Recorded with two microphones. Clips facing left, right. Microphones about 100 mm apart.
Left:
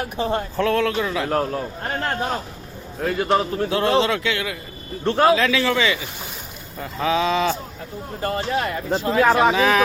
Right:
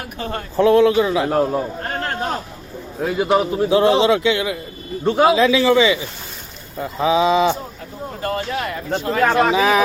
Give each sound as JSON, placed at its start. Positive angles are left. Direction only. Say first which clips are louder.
{"t": 0.2, "sound": "speech", "louder": "left 4 dB", "side_deg": 25}
{"t": 0.5, "sound": "speech", "louder": "right 11 dB", "side_deg": -15}
{"t": 3.0, "sound": "speech", "louder": "right 3 dB", "side_deg": -10}
{"t": 8.2, "sound": "speech", "louder": "even", "side_deg": 30}
{"t": 9.2, "sound": "speech", "louder": "right 1 dB", "side_deg": 5}
{"t": 9.5, "sound": "speech", "louder": "right 2 dB", "side_deg": -10}